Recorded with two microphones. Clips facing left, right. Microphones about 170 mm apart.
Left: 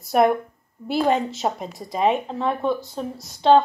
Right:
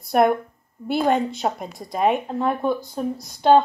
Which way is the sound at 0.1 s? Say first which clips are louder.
Even; centre (ahead or behind).